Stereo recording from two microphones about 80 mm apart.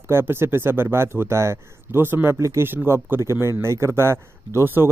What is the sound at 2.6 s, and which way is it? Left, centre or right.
Speech, right.